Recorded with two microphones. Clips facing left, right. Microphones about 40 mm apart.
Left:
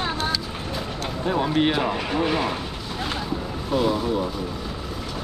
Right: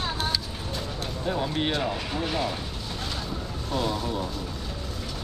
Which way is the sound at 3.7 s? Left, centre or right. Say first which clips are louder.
Left 6 dB; centre.